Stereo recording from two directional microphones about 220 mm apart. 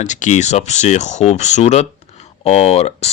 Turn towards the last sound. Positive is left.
turn(degrees=30)  # may be behind; listen again after turning